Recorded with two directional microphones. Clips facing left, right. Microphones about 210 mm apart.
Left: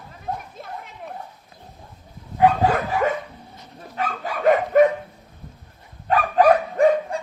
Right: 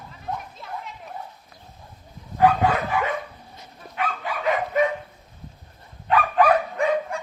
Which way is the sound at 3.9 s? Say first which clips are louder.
Left 1 dB; 45° left (ahead or behind).